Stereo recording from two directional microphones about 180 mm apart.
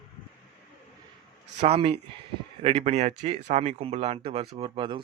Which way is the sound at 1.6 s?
35° right (ahead or behind).